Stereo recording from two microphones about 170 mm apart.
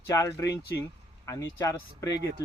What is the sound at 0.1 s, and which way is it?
Speech, 20° left (ahead or behind).